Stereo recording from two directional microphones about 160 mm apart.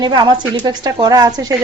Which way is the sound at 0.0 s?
30° right (ahead or behind).